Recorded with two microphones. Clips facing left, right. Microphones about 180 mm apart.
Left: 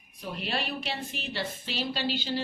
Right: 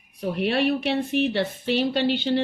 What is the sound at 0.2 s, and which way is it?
A woman's voice, 60° right (ahead or behind).